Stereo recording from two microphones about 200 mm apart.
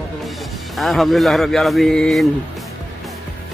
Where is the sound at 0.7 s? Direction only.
Centre (ahead or behind).